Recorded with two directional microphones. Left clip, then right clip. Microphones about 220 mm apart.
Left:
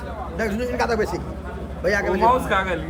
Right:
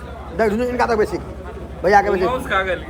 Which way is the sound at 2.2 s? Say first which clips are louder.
Left 1 dB; 30° left (ahead or behind).